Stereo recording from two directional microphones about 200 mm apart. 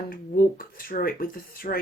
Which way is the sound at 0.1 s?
45° left (ahead or behind).